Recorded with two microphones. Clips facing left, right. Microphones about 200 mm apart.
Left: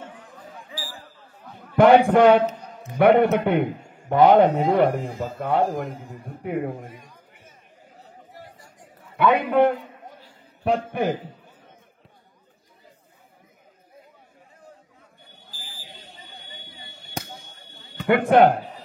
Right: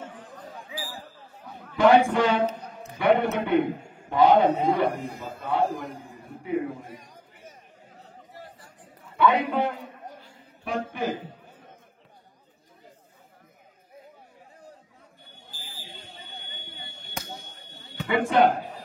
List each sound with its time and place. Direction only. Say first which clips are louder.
1.8 s a man's voice: left 5 dB; 60° left (ahead or behind)
6.9 s a sound: right 1 dB; 40° right (ahead or behind)
8.3 s chatter: right 1 dB; 10° left (ahead or behind)
9.1 s a man's voice: left 3 dB; 60° left (ahead or behind)
18.0 s a man's voice: left 5 dB; 60° left (ahead or behind)